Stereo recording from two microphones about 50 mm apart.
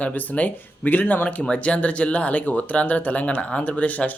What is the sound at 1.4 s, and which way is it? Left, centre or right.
Speech, left.